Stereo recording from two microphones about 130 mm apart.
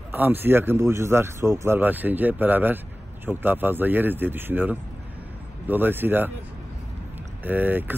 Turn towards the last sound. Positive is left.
turn(degrees=-15)  # may be behind; listen again after turning